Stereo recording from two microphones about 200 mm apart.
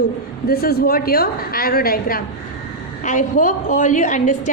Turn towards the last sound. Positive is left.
turn(degrees=40)  # may be behind; listen again after turning